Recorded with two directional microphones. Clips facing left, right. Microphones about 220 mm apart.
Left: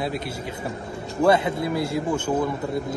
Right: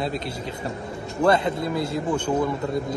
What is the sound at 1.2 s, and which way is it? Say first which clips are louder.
A man's voice: left 1 dB; 10° left (ahead or behind).